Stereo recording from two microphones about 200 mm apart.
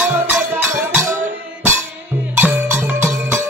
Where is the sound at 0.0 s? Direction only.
10° right (ahead or behind).